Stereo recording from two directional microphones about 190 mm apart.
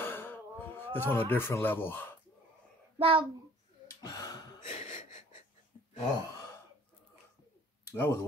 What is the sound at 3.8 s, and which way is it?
Gasp, 20° left (ahead or behind).